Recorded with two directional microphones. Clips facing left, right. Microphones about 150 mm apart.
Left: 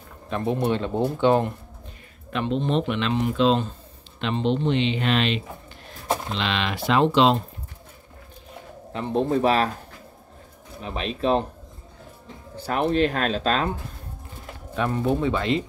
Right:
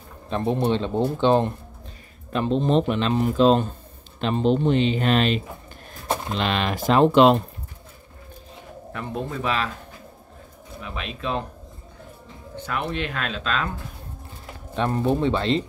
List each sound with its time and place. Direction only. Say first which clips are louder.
0.3 s speech: right 1 dB; 30° right (ahead or behind)
2.3 s speech: right 3 dB; 35° right (ahead or behind); by 7.4 s 55° right (ahead or behind)
8.9 s speech: left 6 dB; 25° left (ahead or behind)
9.3 s speech: left 6 dB; 40° left (ahead or behind)
10.8 s speech: left 5 dB; 35° left (ahead or behind)
12.5 s speech: left 6 dB; 35° left (ahead or behind)
14.8 s speech: right 1 dB; 30° right (ahead or behind)